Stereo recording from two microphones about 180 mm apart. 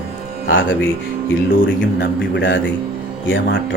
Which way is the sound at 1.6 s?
90° left.